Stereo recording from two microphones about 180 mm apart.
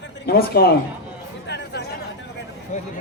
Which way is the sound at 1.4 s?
70° left (ahead or behind).